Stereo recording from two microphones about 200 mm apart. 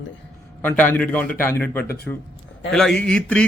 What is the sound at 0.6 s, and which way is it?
A man's voice, 10° left (ahead or behind).